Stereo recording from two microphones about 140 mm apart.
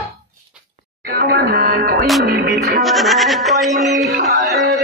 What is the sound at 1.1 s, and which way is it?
Music, 90° right.